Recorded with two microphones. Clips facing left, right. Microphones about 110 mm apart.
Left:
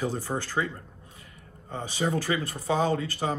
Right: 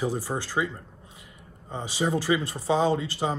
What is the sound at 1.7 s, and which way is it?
Speech, 15° right (ahead or behind).